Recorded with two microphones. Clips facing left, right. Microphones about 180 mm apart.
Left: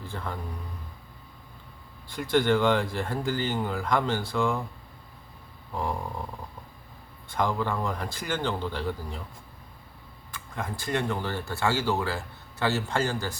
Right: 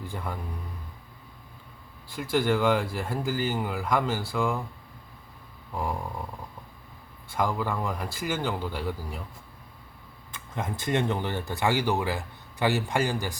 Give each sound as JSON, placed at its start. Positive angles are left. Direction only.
{"t": 0.0, "sound": "speech", "side_deg": -15}
{"t": 2.0, "sound": "speech", "side_deg": -5}
{"t": 7.3, "sound": "speech", "side_deg": -5}
{"t": 10.3, "sound": "speech", "side_deg": -20}